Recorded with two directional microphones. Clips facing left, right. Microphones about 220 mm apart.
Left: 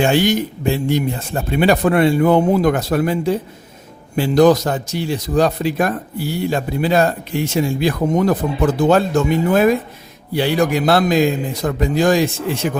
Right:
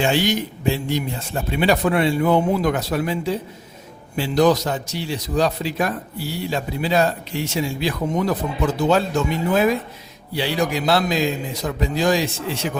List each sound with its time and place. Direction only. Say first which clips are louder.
0.0 s a man's voice: left 4 dB; 50° left (ahead or behind)